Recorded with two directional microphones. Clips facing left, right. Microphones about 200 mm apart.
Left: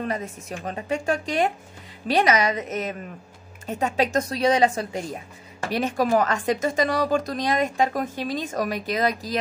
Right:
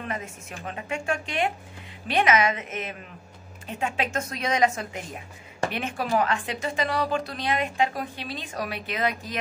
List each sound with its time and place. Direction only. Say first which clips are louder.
0.0 s speech: left 5 dB; 35° left (ahead or behind)